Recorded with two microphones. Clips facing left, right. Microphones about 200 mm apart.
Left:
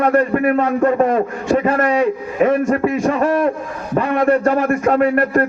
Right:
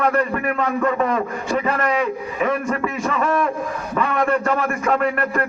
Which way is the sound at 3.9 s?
40° left (ahead or behind).